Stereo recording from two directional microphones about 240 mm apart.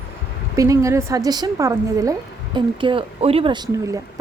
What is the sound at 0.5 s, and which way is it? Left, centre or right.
A woman's voice, centre.